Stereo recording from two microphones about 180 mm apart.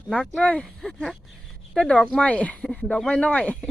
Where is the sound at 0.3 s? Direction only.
5° left (ahead or behind).